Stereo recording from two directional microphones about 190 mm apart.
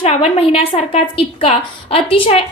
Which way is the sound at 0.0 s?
30° left (ahead or behind).